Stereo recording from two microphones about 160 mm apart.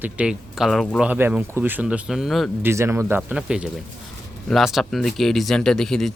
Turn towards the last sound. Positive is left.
turn(degrees=5)  # may be behind; listen again after turning